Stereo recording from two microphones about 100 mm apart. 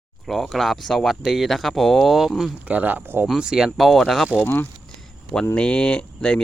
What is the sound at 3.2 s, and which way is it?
Speech, 5° right (ahead or behind).